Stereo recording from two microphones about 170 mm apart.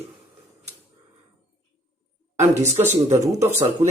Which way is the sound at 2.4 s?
40° right (ahead or behind).